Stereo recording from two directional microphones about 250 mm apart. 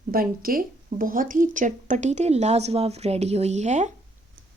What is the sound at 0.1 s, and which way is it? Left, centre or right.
Speech, right.